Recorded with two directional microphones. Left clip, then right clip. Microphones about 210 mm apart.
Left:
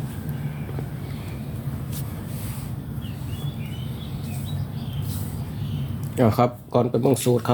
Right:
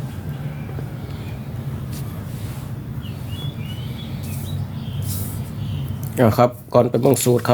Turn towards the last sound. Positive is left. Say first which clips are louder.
# right 4 dB
turn(degrees=-20)  # may be behind; listen again after turning